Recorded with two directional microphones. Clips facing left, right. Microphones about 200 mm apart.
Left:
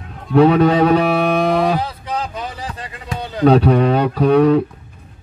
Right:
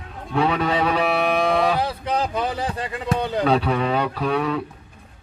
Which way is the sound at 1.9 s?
60° right (ahead or behind).